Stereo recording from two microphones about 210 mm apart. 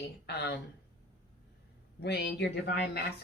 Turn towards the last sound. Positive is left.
turn(degrees=55)  # may be behind; listen again after turning